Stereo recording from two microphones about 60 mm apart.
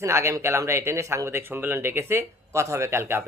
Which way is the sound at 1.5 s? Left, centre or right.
Right.